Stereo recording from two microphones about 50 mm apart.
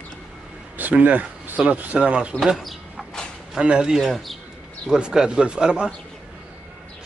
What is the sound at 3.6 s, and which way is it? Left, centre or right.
Speech, right.